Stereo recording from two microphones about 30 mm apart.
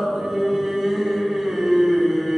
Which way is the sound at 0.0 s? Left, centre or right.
Centre.